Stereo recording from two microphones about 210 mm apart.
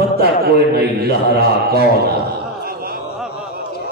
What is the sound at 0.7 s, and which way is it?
A man's voice, 50° right (ahead or behind).